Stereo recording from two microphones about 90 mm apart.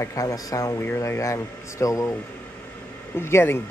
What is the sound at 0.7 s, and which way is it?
A man's voice, 30° left (ahead or behind).